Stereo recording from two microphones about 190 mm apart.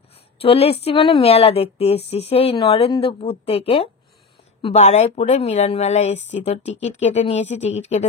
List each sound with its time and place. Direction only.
0.4 s speech: 30° left (ahead or behind)